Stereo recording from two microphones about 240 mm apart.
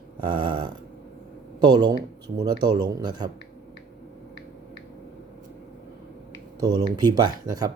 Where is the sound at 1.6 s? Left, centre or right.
Centre.